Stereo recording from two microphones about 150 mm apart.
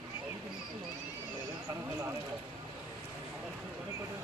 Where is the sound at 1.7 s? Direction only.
20° right (ahead or behind).